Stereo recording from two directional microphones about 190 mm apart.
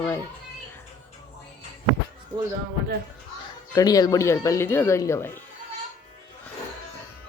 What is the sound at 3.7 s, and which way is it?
Speech, 20° left (ahead or behind).